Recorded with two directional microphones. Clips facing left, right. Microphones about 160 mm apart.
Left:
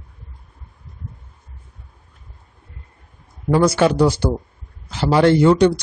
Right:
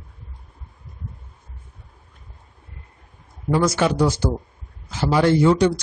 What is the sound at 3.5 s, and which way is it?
A man's voice, 55° left (ahead or behind).